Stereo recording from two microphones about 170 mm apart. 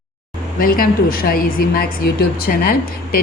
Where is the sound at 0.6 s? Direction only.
60° left (ahead or behind).